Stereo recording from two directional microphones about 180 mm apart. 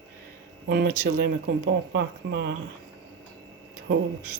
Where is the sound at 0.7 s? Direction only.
60° right (ahead or behind); by 2.6 s 75° right (ahead or behind).